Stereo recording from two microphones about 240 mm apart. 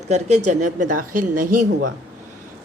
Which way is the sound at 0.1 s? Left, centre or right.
Right.